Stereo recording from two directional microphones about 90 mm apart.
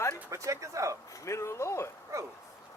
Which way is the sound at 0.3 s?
35° right (ahead or behind).